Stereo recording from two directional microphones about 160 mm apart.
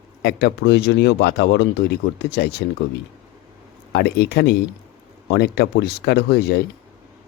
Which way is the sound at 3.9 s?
90° left.